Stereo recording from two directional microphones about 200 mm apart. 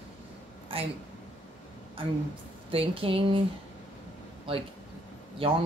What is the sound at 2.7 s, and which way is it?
Speech, 30° right (ahead or behind).